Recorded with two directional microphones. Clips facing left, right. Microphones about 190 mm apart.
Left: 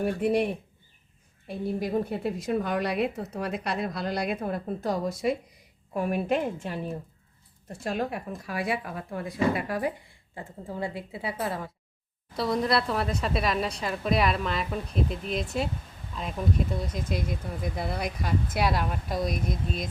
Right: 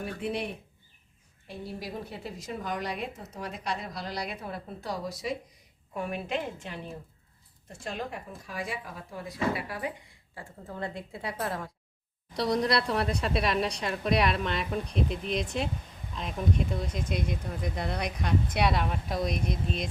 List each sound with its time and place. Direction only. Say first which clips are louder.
0.3 s a woman's voice: left 6 dB; 50° left (ahead or behind)
7.7 s speech: left 6 dB; 60° left (ahead or behind); by 9.9 s 45° left (ahead or behind)
10.1 s a woman's voice: left 4 dB; 20° left (ahead or behind)
10.7 s speech: left 3 dB; 10° left (ahead or behind)